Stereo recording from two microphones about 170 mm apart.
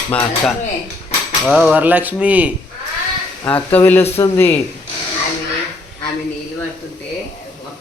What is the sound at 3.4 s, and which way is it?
Speech, 10° left (ahead or behind).